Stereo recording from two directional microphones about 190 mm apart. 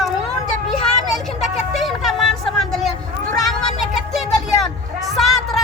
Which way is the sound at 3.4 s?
Centre (ahead or behind).